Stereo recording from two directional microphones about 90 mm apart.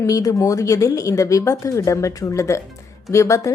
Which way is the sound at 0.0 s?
40° left (ahead or behind).